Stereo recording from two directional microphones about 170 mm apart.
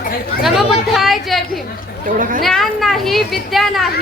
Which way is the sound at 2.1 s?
50° right (ahead or behind).